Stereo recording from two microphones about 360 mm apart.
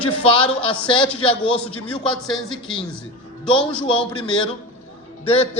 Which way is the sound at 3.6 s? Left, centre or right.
Centre.